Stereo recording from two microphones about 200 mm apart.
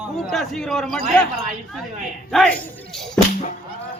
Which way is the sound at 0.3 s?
Centre (ahead or behind).